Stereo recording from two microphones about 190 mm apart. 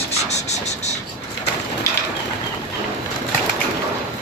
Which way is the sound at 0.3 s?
35° left (ahead or behind).